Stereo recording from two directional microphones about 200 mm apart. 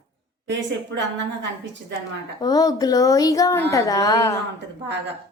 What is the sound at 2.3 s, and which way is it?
Speech, 20° left (ahead or behind).